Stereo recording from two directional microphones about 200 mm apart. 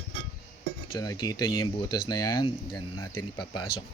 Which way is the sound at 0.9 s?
20° left (ahead or behind).